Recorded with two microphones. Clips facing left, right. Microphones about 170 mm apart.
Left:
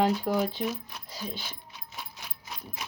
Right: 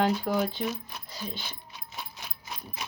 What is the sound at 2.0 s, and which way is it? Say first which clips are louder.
Ratchet: right 2 dB; 20° right (ahead or behind).